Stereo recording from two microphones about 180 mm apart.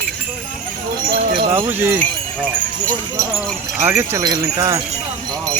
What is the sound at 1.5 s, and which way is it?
Speech, 10° right (ahead or behind).